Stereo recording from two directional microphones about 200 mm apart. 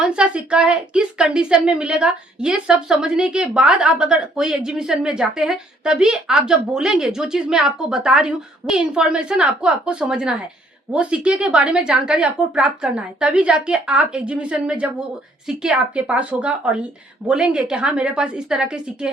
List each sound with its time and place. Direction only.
0.0 s a woman's voice: 5° right (ahead or behind)